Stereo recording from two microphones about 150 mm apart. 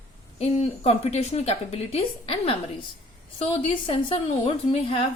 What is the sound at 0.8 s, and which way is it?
A woman's voice, 45° left (ahead or behind).